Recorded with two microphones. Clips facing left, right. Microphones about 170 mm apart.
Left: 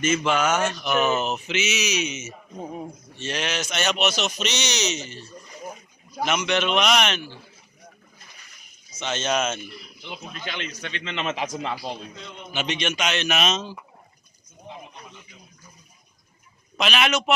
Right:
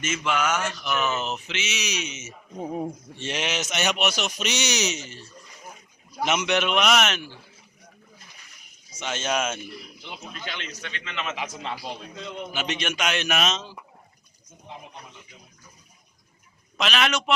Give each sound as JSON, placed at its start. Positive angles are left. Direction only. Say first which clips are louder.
{"t": 0.0, "sound": "speech", "louder": "left 4 dB", "side_deg": 35}
{"t": 3.2, "sound": "a man's voice", "louder": "left 1 dB", "side_deg": -20}
{"t": 6.2, "sound": "a man's voice", "louder": "even", "side_deg": -20}
{"t": 9.0, "sound": "a man's voice", "louder": "left 2 dB", "side_deg": -10}
{"t": 10.4, "sound": "a man's voice", "louder": "left 4 dB", "side_deg": 20}
{"t": 12.5, "sound": "a man's voice", "louder": "left 3 dB", "side_deg": -5}
{"t": 13.5, "sound": "speech", "louder": "left 4 dB", "side_deg": 5}
{"t": 16.7, "sound": "a man's voice", "louder": "left 2 dB", "side_deg": 5}